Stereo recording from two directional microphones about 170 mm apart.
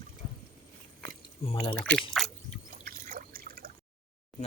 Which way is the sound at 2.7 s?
55° right (ahead or behind).